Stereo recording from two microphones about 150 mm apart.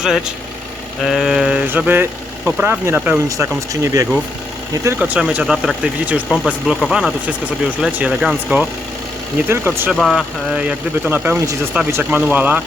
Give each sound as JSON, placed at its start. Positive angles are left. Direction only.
{"t": 0.0, "sound": "speech", "side_deg": -5}
{"t": 3.2, "sound": "speech", "side_deg": -20}
{"t": 4.9, "sound": "speech", "side_deg": -10}
{"t": 9.9, "sound": "speech", "side_deg": 0}